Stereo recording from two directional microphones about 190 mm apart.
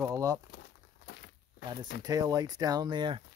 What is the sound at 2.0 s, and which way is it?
Speech, 20° right (ahead or behind).